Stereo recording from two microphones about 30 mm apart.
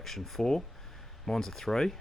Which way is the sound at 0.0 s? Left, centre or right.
Centre.